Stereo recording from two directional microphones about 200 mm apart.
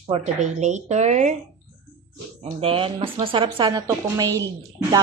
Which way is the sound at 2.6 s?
30° right (ahead or behind).